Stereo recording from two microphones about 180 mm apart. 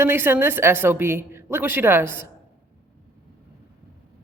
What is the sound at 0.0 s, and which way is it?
Speech, 10° right (ahead or behind).